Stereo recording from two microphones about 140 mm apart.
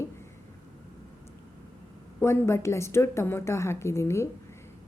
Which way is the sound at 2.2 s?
20° left (ahead or behind).